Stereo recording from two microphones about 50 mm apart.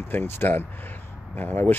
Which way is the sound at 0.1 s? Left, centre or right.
Left.